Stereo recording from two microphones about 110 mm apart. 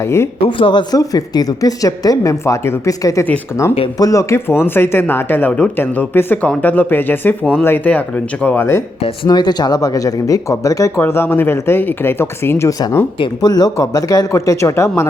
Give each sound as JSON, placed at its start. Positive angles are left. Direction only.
{"t": 0.4, "sound": "speech", "side_deg": 50}
{"t": 5.7, "sound": "speech", "side_deg": 20}
{"t": 9.2, "sound": "speech", "side_deg": 40}
{"t": 11.0, "sound": "speech", "side_deg": 20}
{"t": 13.4, "sound": "speech", "side_deg": 35}